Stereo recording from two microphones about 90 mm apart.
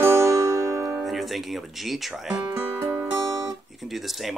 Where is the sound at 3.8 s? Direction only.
Centre (ahead or behind).